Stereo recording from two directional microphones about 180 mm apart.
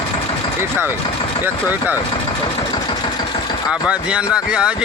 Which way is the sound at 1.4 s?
10° right (ahead or behind).